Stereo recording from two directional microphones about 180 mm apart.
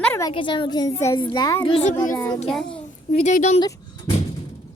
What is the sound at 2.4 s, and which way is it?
Speech, centre (ahead or behind).